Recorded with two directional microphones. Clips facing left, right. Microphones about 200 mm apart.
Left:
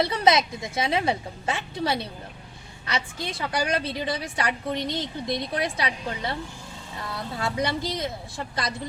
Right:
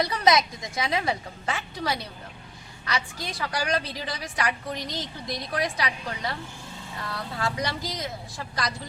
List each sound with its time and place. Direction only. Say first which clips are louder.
0.0 s a woman's voice: left 1 dB; 25° left (ahead or behind)